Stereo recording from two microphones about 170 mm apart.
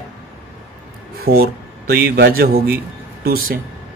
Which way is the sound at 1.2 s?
65° right (ahead or behind).